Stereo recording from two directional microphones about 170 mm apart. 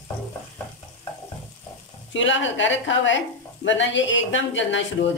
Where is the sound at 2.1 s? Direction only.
90° left.